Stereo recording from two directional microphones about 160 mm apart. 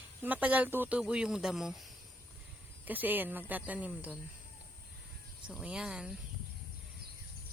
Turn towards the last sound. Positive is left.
turn(degrees=-5)  # may be behind; listen again after turning